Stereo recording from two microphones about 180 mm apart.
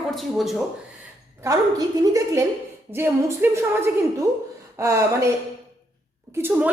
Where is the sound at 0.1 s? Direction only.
Centre (ahead or behind).